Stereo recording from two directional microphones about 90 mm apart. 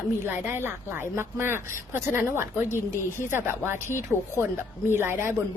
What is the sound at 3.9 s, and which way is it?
Speech, 25° left (ahead or behind).